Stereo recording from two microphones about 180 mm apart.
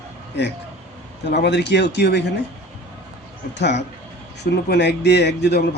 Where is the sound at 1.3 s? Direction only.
70° left (ahead or behind).